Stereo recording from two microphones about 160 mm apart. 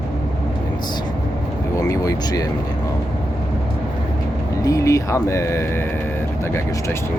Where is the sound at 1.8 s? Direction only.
20° left (ahead or behind).